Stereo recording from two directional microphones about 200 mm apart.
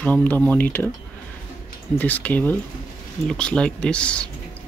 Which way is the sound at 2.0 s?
10° left (ahead or behind).